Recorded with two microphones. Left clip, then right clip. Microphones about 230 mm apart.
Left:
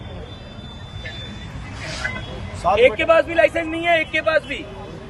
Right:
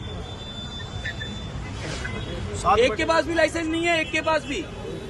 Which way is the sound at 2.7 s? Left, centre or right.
Centre.